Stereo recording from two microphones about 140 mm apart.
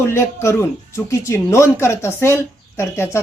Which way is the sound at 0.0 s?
20° left (ahead or behind).